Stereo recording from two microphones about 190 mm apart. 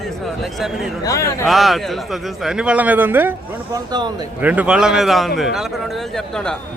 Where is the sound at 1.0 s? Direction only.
15° left (ahead or behind).